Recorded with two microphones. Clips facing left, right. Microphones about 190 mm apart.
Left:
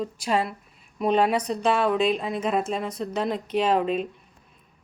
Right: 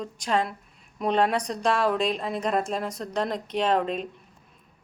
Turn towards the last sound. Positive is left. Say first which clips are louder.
# left 2 dB
turn(degrees=5)  # may be behind; listen again after turning